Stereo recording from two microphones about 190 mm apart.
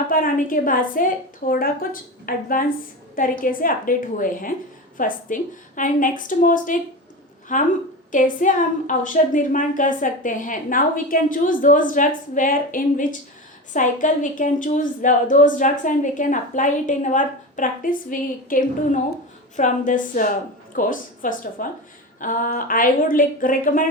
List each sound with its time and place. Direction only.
0.1 s a woman's voice: 45° left (ahead or behind)